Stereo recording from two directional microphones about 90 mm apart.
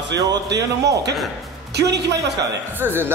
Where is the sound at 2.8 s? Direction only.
25° right (ahead or behind).